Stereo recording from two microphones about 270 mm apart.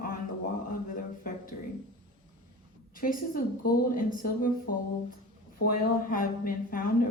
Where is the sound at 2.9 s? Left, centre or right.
Left.